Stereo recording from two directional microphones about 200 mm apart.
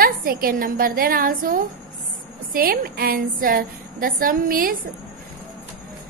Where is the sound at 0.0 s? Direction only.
45° right (ahead or behind).